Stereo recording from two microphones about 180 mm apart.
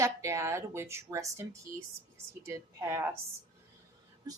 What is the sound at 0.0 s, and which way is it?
A woman's voice, 15° right (ahead or behind).